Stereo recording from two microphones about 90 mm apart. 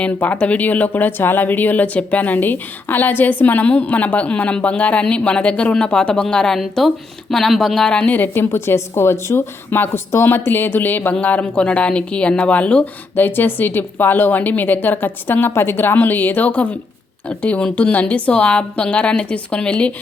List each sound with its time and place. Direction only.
0.0 s speech: 15° left (ahead or behind)